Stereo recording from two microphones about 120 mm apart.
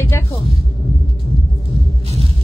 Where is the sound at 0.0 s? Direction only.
20° left (ahead or behind).